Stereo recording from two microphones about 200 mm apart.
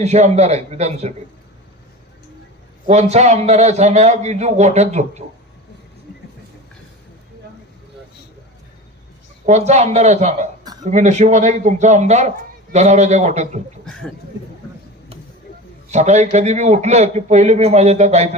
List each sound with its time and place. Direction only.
0.0 s a man's voice: 35° right (ahead or behind)
2.8 s a man's voice: 35° right (ahead or behind)
9.5 s a man's voice: 35° right (ahead or behind)
10.6 s a sound: 20° right (ahead or behind)
10.9 s a man's voice: 35° right (ahead or behind)
15.9 s a man's voice: 35° right (ahead or behind)